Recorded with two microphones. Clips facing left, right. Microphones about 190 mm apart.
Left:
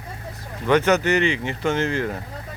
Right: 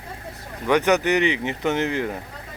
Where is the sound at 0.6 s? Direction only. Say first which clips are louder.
Left 1 dB; 15° right (ahead or behind).